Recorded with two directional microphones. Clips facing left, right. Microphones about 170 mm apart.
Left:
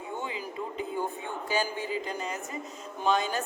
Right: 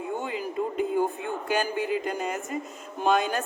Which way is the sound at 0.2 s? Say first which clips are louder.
Right 6 dB; 50° right (ahead or behind).